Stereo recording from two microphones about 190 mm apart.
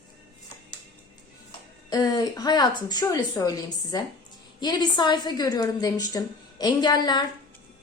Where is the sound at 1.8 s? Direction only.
20° left (ahead or behind).